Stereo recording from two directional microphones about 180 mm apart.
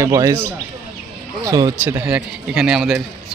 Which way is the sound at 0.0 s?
20° right (ahead or behind).